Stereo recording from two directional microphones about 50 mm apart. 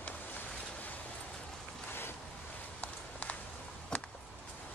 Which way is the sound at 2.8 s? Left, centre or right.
Left.